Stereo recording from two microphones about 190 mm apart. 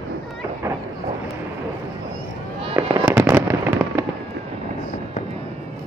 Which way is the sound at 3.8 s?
Centre (ahead or behind).